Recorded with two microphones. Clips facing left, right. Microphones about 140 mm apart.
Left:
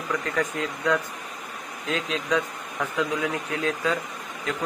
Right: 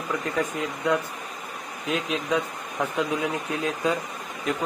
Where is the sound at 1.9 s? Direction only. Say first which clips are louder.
Right 1 dB; 10° right (ahead or behind).